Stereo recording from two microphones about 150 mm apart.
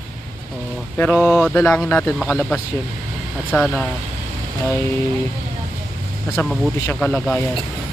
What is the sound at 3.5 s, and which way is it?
Speech, 15° left (ahead or behind).